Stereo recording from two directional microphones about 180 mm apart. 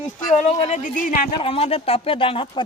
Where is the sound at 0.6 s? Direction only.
40° left (ahead or behind).